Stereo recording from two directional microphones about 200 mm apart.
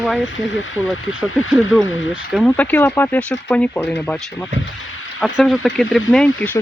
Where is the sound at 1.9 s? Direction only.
75° left (ahead or behind).